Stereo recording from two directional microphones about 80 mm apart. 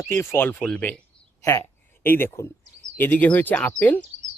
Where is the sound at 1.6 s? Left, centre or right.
Left.